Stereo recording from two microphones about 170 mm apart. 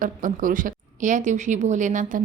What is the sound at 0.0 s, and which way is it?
A woman's voice, 50° right (ahead or behind).